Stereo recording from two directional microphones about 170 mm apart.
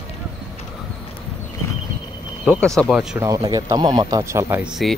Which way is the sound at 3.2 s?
20° right (ahead or behind).